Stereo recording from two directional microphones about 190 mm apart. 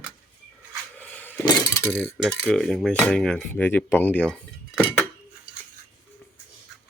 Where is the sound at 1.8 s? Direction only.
5° left (ahead or behind).